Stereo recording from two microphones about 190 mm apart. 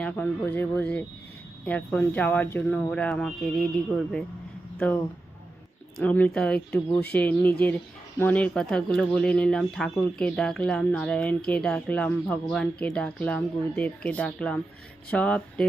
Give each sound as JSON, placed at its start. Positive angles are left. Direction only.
{"t": 0.0, "sound": "speech", "side_deg": 10}
{"t": 6.0, "sound": "speech", "side_deg": 5}